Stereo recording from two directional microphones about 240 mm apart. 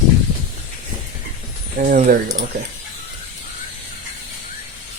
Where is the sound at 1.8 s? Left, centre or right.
Right.